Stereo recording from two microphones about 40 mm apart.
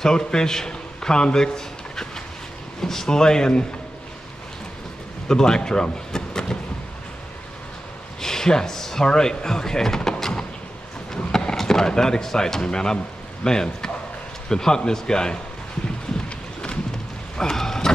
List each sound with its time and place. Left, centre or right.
0.0 s a man's voice: centre
5.3 s speech: centre
8.2 s a man's voice: centre
17.4 s a sound: centre